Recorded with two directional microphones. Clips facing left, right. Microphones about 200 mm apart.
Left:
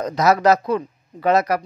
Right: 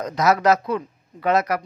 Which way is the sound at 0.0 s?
35° left (ahead or behind).